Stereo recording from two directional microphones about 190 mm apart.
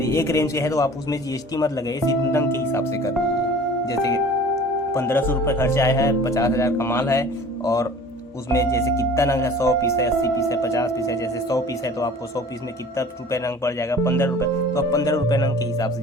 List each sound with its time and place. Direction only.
0.0 s speech: 15° left (ahead or behind)